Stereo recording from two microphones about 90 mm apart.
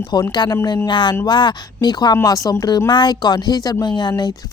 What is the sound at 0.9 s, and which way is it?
A woman's voice, 60° left (ahead or behind).